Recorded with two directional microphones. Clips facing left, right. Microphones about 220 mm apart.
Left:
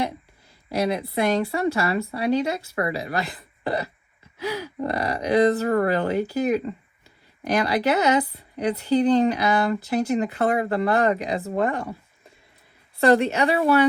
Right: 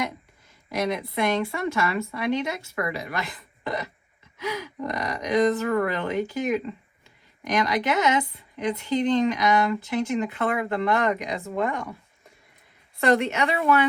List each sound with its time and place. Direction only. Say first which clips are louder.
0.7 s speech: left 3 dB; 35° left (ahead or behind)
13.0 s speech: left 3 dB; 35° left (ahead or behind)